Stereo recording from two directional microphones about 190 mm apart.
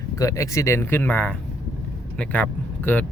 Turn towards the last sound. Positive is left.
turn(degrees=10)  # may be behind; listen again after turning